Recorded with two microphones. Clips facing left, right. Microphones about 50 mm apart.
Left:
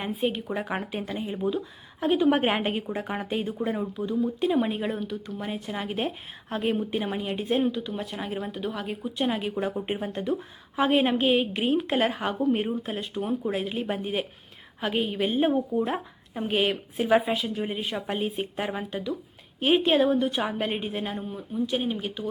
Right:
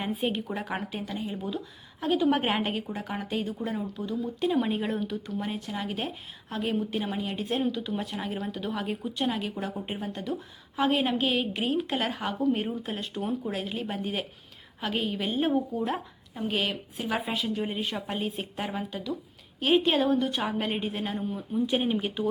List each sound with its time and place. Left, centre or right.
0.0 s speech: centre
4.4 s speech: centre
5.5 s speech: centre
7.8 s speech: centre
16.3 s speech: left
17.2 s speech: centre
21.7 s speech: centre